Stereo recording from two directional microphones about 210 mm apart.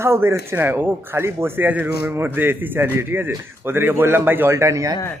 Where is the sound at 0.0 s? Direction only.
10° right (ahead or behind).